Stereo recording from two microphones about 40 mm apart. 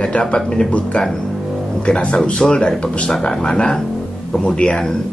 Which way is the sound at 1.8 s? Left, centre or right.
Left.